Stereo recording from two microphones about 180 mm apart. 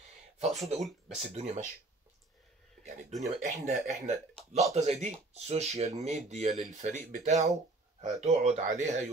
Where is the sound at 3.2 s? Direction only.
40° right (ahead or behind).